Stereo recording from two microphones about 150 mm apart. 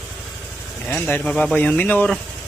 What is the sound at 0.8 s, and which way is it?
A man's voice, 15° left (ahead or behind).